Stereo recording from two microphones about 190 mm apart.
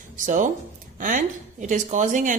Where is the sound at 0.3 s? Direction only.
40° right (ahead or behind).